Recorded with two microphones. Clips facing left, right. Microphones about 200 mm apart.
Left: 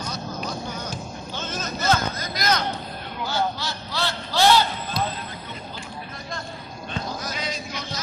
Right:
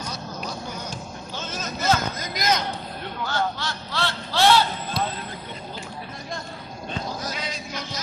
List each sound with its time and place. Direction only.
1.3 s vehicle: 5° right (ahead or behind)
2.3 s vehicle: 20° right (ahead or behind)
3.3 s a sound: 5° left (ahead or behind)